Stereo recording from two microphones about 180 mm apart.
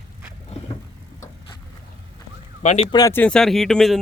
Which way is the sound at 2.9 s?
20° left (ahead or behind).